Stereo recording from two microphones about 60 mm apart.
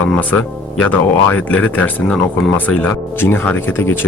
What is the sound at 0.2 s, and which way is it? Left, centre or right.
Speech, left.